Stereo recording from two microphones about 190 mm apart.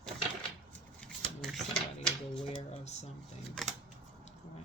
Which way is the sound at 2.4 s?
30° left (ahead or behind).